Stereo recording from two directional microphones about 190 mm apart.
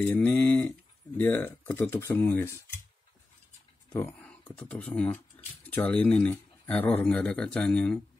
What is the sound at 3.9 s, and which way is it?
Speech, 10° left (ahead or behind).